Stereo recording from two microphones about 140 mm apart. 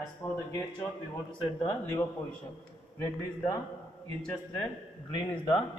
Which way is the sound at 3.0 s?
20° left (ahead or behind).